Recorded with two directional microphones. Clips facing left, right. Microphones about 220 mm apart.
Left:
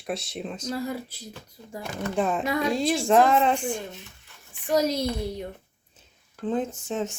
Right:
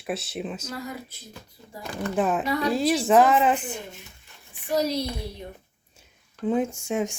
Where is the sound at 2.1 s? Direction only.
5° right (ahead or behind).